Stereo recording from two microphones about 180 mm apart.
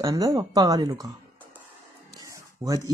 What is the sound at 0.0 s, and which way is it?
Speech, 20° right (ahead or behind).